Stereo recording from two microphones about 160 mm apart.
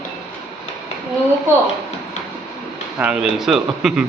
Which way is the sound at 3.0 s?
5° right (ahead or behind).